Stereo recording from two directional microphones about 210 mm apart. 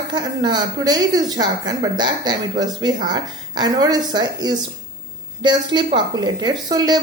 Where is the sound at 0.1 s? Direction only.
20° right (ahead or behind).